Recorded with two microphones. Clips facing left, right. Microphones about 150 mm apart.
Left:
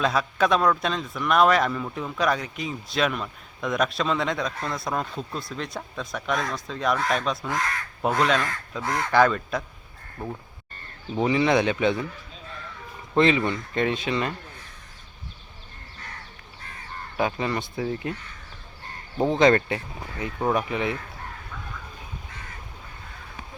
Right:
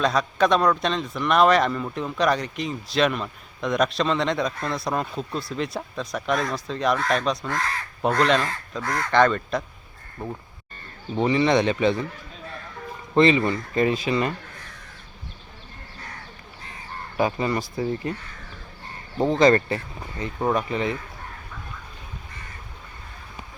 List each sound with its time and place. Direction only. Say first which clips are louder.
0.0 s speech: right 2 dB; 5° left (ahead or behind)
8.8 s speech: even; 15° left (ahead or behind)
9.2 s speech: right 1 dB; 5° left (ahead or behind)
13.1 s speech: right 2 dB; centre (ahead or behind)
17.2 s speech: right 2 dB; centre (ahead or behind)
19.2 s speech: right 1 dB; centre (ahead or behind)